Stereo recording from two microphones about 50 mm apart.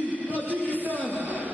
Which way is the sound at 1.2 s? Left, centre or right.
Right.